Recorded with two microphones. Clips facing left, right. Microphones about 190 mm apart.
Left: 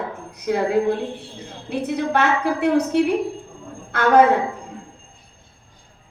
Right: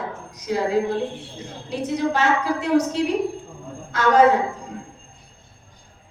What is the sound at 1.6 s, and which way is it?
A woman's voice, 60° left (ahead or behind).